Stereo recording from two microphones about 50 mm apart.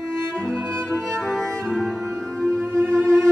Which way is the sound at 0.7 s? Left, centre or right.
Centre.